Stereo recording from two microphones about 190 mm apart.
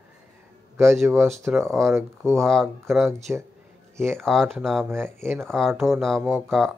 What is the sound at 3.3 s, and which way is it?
Speech, 10° right (ahead or behind).